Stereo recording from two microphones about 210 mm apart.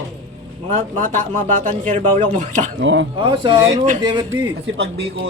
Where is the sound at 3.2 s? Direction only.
25° right (ahead or behind).